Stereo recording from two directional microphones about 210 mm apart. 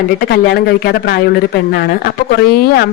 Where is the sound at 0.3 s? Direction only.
50° left (ahead or behind).